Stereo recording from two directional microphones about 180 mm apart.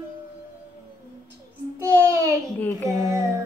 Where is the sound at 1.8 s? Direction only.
15° right (ahead or behind).